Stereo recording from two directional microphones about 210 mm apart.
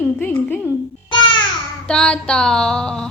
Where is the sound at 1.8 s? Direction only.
5° left (ahead or behind).